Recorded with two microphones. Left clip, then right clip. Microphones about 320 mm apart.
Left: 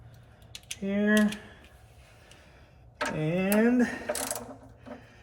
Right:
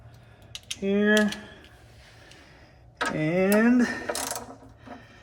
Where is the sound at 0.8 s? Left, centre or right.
Right.